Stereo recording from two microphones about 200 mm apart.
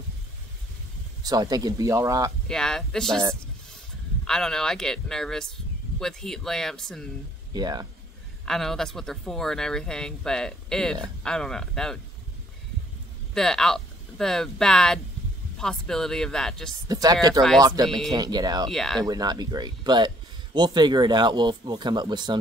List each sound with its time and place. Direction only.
1.2 s speech: 20° right (ahead or behind)
2.4 s speech: 5° left (ahead or behind)
4.2 s speech: 5° left (ahead or behind)
7.5 s speech: 20° right (ahead or behind)
8.5 s speech: centre (ahead or behind)
13.3 s speech: centre (ahead or behind)
16.8 s speech: 20° right (ahead or behind)
18.7 s speech: centre (ahead or behind)
19.0 s speech: 20° right (ahead or behind)